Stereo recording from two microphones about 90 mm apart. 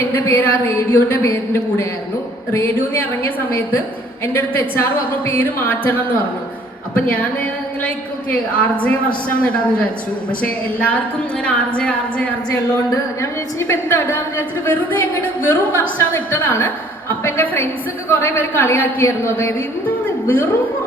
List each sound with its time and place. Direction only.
0.1 s a woman's voice: 25° left (ahead or behind)
1.2 s a woman's voice: 35° left (ahead or behind); by 12.3 s 15° left (ahead or behind)
13.6 s a woman's voice: 30° left (ahead or behind)